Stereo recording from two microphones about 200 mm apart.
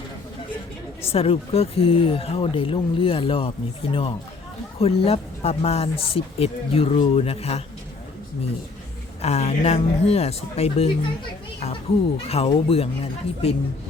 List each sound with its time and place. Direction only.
1.0 s speech: 30° left (ahead or behind)
4.8 s speech: 30° left (ahead or behind)
9.2 s speech: 30° left (ahead or behind)